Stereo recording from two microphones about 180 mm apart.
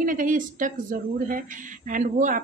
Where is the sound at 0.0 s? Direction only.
50° right (ahead or behind).